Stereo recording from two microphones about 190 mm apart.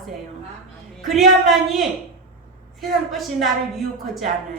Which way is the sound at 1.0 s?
Centre (ahead or behind).